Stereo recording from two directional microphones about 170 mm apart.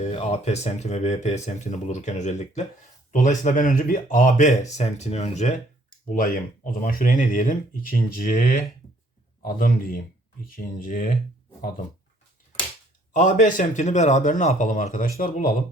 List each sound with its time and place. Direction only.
0.0 s speech: 40° left (ahead or behind)
6.1 s speech: 55° left (ahead or behind)
13.1 s speech: 45° left (ahead or behind)